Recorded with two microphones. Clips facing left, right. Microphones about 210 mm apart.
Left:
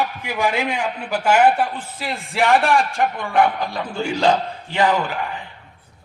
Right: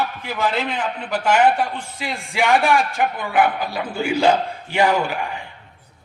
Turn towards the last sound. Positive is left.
turn(degrees=-15)  # may be behind; listen again after turning